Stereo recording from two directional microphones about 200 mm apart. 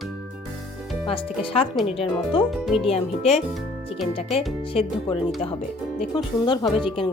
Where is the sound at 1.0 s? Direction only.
25° left (ahead or behind).